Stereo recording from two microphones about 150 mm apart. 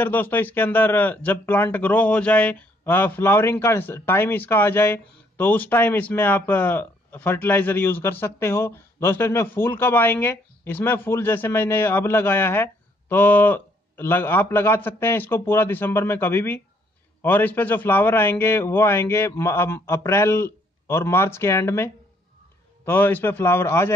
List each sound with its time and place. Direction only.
0.0 s speech: 10° left (ahead or behind)